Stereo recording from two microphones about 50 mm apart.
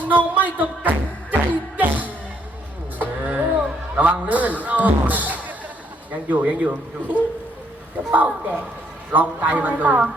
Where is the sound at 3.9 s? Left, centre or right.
Right.